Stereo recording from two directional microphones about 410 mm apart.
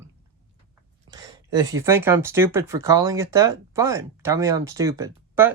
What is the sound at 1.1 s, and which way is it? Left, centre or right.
Speech, centre.